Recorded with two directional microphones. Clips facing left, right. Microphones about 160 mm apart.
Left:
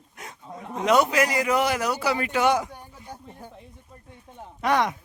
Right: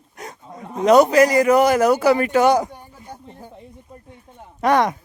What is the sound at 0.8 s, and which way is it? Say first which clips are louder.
A man's voice: right 8 dB; 40° right (ahead or behind).